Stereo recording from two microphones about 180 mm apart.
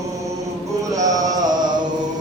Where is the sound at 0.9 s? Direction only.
20° right (ahead or behind).